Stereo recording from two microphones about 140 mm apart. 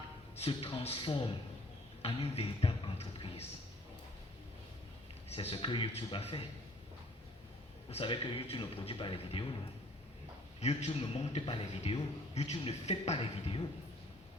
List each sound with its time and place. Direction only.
0.3 s a man's voice: 45° left (ahead or behind)
5.3 s a man's voice: 45° left (ahead or behind)
7.9 s a man's voice: 40° left (ahead or behind)
10.6 s a man's voice: 50° left (ahead or behind)
13.1 s a man's voice: 35° left (ahead or behind)